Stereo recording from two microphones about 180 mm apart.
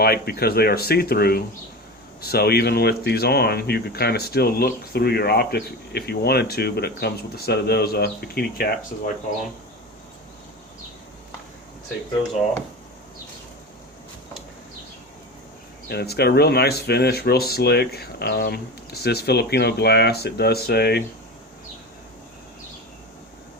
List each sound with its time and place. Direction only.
0.0 s speech: 60° left (ahead or behind)
15.9 s speech: 65° left (ahead or behind)